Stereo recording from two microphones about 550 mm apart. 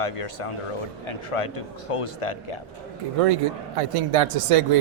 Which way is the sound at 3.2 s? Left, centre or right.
Right.